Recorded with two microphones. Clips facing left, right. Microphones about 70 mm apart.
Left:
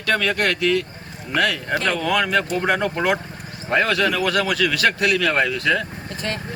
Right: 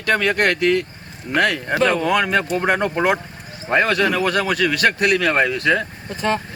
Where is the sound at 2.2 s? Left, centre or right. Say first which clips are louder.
Right 1 dB; centre.